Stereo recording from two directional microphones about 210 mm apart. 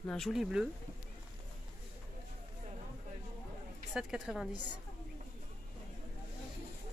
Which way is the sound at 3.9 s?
5° right (ahead or behind).